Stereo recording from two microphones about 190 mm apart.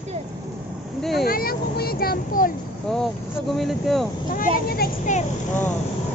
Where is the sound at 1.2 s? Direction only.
50° left (ahead or behind).